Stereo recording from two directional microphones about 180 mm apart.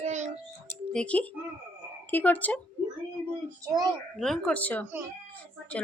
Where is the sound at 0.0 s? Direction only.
40° right (ahead or behind).